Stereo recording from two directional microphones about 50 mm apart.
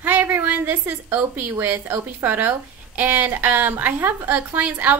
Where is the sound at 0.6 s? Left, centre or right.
Right.